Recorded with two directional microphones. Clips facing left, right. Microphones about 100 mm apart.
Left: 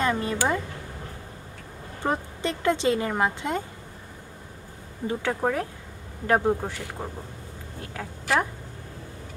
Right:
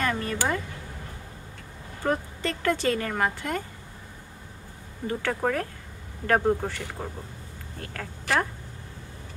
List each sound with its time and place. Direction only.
0.0 s a sound: 20° left (ahead or behind)
2.0 s speech: 20° left (ahead or behind)
5.0 s speech: 15° left (ahead or behind)